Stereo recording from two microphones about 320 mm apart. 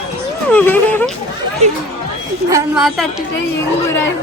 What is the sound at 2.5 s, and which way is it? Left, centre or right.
Speech, centre.